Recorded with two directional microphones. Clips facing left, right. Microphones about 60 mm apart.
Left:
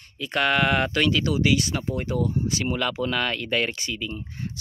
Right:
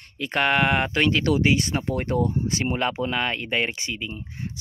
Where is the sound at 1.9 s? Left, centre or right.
Right.